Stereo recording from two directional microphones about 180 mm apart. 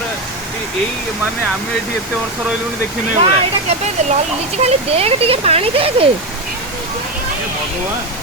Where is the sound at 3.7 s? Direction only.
35° right (ahead or behind).